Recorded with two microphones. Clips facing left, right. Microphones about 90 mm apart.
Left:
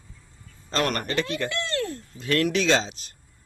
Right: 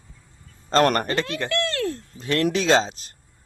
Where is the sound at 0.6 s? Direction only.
45° right (ahead or behind).